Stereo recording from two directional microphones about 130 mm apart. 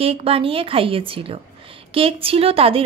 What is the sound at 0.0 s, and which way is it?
Speech, 50° right (ahead or behind).